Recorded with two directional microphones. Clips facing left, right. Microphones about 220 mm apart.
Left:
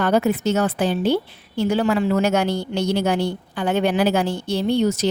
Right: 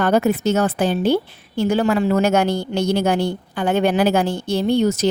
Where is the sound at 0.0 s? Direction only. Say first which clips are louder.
Right 2 dB; 45° right (ahead or behind).